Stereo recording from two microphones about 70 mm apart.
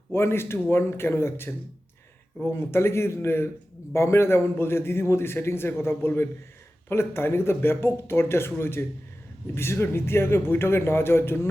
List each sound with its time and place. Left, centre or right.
0.1 s a man's voice: left